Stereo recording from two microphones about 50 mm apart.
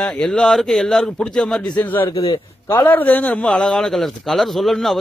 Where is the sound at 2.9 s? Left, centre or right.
Left.